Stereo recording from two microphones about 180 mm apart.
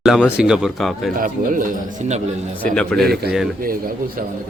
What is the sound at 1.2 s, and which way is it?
Speech, 50° right (ahead or behind).